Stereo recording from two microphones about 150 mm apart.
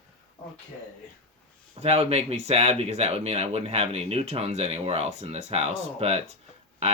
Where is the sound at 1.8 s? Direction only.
45° right (ahead or behind).